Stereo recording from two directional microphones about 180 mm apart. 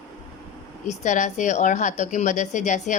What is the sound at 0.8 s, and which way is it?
A woman's voice, 40° left (ahead or behind).